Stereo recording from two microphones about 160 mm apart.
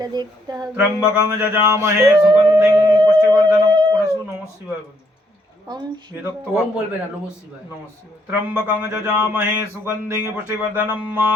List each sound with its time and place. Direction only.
0.0 s speech: 25° right (ahead or behind)
1.0 s speech: 10° right (ahead or behind); by 4.0 s 25° right (ahead or behind)
5.7 s speech: 25° right (ahead or behind)
6.2 s speech: 10° right (ahead or behind)
8.3 s speech: 10° right (ahead or behind)